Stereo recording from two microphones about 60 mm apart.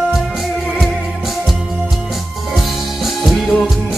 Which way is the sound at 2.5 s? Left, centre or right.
Centre.